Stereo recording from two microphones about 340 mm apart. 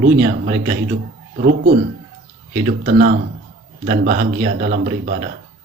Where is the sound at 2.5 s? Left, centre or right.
Right.